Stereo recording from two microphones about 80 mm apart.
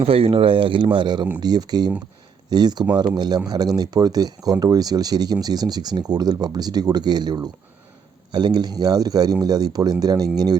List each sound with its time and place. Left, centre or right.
0.4 s speech: right
1.4 s speech: right